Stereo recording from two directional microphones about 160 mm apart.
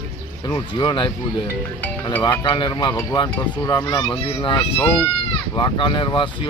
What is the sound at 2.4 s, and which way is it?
Speech, 30° left (ahead or behind).